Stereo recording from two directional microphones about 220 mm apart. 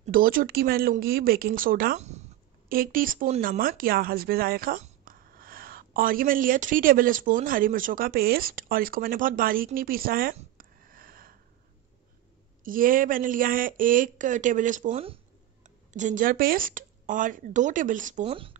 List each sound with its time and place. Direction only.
0.0 s speech: 40° right (ahead or behind)
10.3 s a sound: 40° right (ahead or behind)
12.6 s speech: 40° right (ahead or behind)
18.2 s speech: 25° right (ahead or behind)